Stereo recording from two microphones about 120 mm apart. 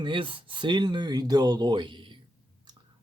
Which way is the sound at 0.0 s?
45° right (ahead or behind).